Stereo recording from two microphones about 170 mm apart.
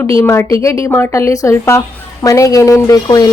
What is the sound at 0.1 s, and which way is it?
A woman's voice, 15° left (ahead or behind).